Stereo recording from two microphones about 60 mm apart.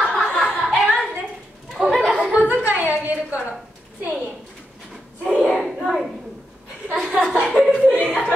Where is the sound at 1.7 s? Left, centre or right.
Centre.